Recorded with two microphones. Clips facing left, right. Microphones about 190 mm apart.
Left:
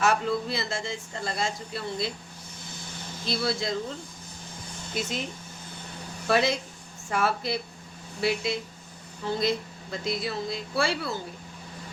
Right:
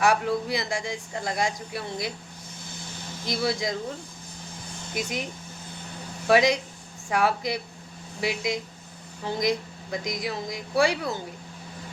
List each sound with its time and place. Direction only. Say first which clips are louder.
0.0 s a man's voice: right 2 dB; 15° right (ahead or behind)
3.2 s a man's voice: right 1 dB; 15° right (ahead or behind)
4.9 s a man's voice: right 1 dB; 15° right (ahead or behind)